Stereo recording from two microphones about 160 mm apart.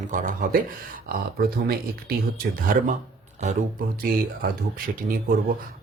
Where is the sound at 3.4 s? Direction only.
45° right (ahead or behind).